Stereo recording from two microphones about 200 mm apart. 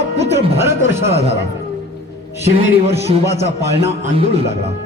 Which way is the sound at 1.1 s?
30° right (ahead or behind).